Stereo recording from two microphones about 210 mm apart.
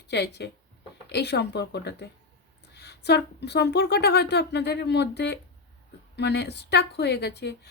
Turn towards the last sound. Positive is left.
turn(degrees=50)  # may be behind; listen again after turning